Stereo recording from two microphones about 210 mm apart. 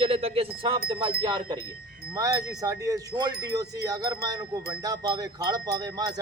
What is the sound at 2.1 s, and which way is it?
Speech, 15° right (ahead or behind).